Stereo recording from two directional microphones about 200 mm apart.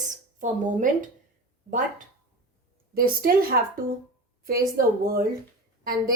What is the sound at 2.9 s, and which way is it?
Speech, 45° right (ahead or behind).